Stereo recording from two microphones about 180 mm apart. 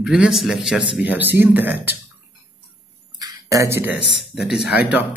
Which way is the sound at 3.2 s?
20° right (ahead or behind).